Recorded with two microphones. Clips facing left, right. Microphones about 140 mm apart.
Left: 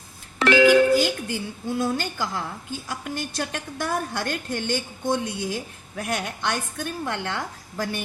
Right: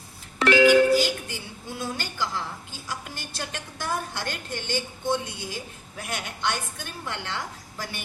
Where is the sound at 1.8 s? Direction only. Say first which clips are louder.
Left 4 dB; 50° left (ahead or behind).